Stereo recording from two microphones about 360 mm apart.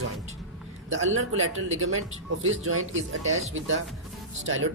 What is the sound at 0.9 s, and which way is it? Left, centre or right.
Speech, right.